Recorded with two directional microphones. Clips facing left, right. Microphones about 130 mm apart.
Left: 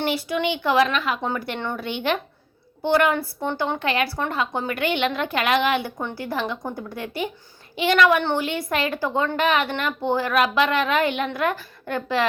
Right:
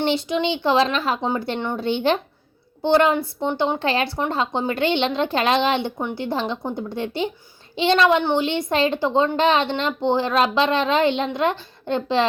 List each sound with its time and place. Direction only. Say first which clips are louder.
0.0 s speech: right 2 dB; 25° right (ahead or behind)
3.8 s speech: right 2 dB; 30° right (ahead or behind)
8.2 s a woman's voice: right 3 dB; 15° right (ahead or behind)
8.4 s speech: right 4 dB; 25° right (ahead or behind)